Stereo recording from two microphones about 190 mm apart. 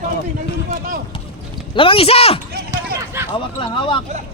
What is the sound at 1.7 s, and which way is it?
Speech, 30° left (ahead or behind).